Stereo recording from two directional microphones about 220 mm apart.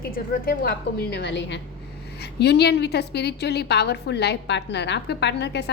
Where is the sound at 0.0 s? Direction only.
45° left (ahead or behind).